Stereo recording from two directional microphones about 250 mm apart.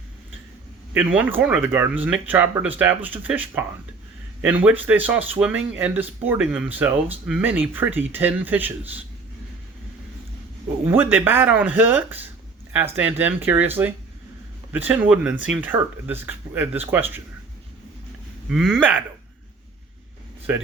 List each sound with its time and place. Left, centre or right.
0.9 s speech: centre
10.8 s speech: centre
18.4 s speech: centre